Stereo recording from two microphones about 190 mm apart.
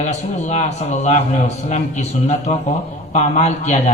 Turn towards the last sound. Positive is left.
turn(degrees=35)  # may be behind; listen again after turning